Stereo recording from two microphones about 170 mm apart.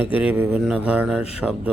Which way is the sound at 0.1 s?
10° right (ahead or behind).